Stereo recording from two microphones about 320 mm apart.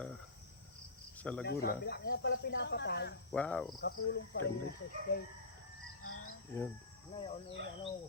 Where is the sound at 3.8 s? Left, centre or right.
Left.